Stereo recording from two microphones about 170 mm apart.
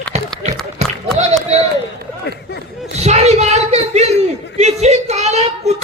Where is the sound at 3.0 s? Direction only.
40° right (ahead or behind).